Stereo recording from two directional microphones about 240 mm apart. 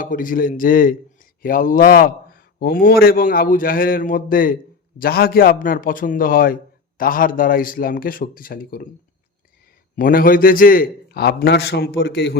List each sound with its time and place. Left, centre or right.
0.0 s a man's voice: left
9.9 s a man's voice: left